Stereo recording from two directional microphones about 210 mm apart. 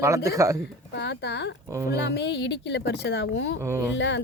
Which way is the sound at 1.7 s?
15° right (ahead or behind).